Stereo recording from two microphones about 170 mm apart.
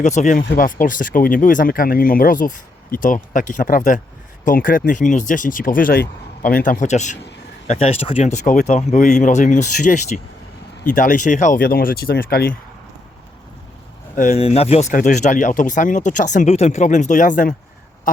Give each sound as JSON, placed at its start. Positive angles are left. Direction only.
{"t": 0.0, "sound": "speech", "side_deg": 45}
{"t": 6.7, "sound": "speech", "side_deg": 45}
{"t": 14.2, "sound": "speech", "side_deg": 40}